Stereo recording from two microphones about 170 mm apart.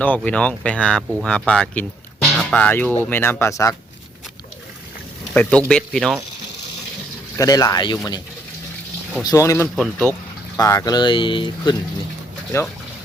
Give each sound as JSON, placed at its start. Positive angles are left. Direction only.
{"t": 0.0, "sound": "speech", "side_deg": 10}
{"t": 5.3, "sound": "speech", "side_deg": 5}
{"t": 7.3, "sound": "speech", "side_deg": 20}
{"t": 9.2, "sound": "speech", "side_deg": 20}
{"t": 9.7, "sound": "speech", "side_deg": 0}
{"t": 10.6, "sound": "speech", "side_deg": 20}